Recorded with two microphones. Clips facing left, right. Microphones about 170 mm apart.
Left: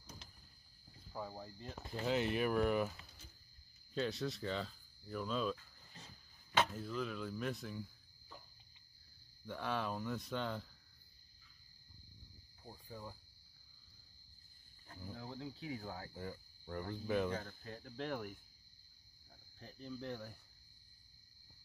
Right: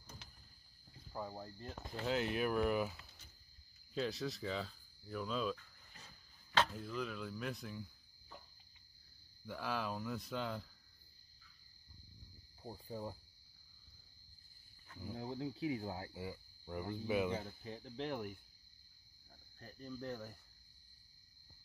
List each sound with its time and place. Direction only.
1.1 s speech: centre (ahead or behind)
9.5 s speech: centre (ahead or behind)
12.6 s speech: 25° right (ahead or behind)
15.1 s speech: 35° right (ahead or behind)
15.7 s speech: 25° right (ahead or behind)
16.1 s speech: 10° right (ahead or behind)
19.6 s speech: 5° right (ahead or behind)